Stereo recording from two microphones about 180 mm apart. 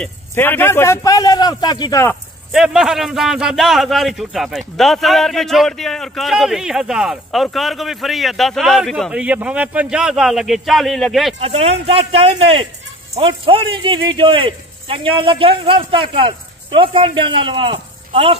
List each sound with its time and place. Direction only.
0.0 s a man's voice: 10° left (ahead or behind)
2.5 s a man's voice: 5° right (ahead or behind)
11.4 s speech: 35° right (ahead or behind)